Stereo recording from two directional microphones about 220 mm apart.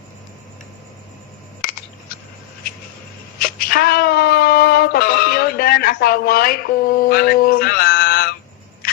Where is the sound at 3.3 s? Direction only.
45° left (ahead or behind).